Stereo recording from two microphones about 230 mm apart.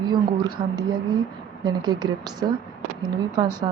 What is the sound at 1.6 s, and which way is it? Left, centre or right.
Speech, centre.